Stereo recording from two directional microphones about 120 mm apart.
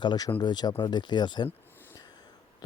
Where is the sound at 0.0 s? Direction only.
35° left (ahead or behind).